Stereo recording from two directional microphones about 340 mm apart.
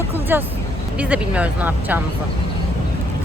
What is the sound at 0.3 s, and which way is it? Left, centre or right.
Speech, centre.